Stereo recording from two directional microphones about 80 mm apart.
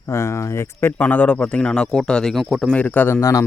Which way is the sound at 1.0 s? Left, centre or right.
Centre.